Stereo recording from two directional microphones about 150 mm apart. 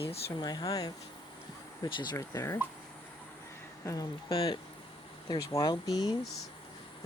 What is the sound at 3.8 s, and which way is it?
Speech, 25° left (ahead or behind).